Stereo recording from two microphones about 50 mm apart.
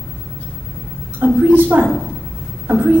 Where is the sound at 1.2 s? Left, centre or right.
Right.